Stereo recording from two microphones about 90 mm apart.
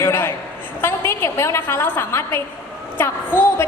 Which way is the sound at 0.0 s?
25° left (ahead or behind).